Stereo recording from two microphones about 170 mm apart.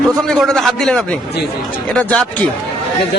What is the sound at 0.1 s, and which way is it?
A man's voice, centre (ahead or behind).